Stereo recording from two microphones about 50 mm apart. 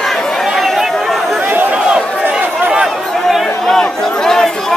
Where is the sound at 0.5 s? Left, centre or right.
Centre.